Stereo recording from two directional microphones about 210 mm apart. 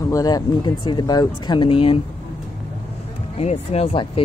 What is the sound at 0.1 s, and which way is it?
Speech, 20° left (ahead or behind).